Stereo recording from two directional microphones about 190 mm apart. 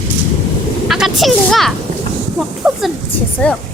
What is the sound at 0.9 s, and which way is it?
Speech, centre (ahead or behind).